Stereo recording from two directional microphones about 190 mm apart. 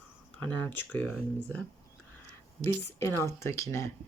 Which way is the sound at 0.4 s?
10° left (ahead or behind).